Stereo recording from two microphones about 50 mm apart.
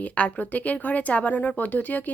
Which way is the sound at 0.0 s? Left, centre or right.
Left.